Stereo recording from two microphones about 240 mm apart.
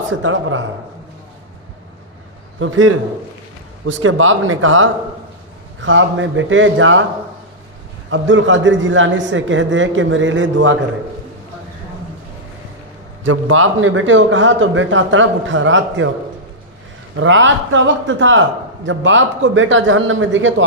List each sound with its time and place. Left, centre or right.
0.1 s a man's voice: right
2.6 s a man's voice: right
8.1 s a man's voice: right
13.2 s a man's voice: right
17.2 s a man's voice: right